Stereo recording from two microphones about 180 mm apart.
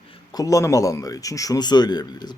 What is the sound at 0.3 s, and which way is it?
A man's voice, 20° left (ahead or behind).